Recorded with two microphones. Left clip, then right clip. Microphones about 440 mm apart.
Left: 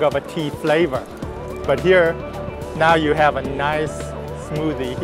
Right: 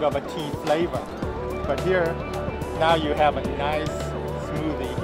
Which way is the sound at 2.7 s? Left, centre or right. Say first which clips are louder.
Left 6 dB; left.